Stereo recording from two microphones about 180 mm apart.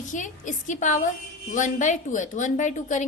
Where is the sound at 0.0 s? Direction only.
45° left (ahead or behind).